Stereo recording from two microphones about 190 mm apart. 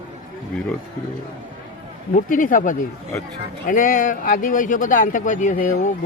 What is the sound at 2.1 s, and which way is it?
A man's voice, 45° left (ahead or behind).